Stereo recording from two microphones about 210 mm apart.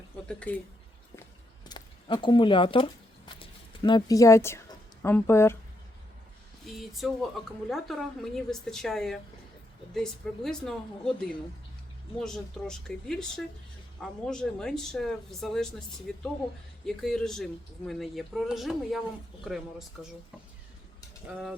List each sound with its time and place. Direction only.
0.3 s speech: 5° left (ahead or behind)
1.1 s a sound: 15° left (ahead or behind)
5.0 s speech: 10° left (ahead or behind)
6.7 s speech: centre (ahead or behind)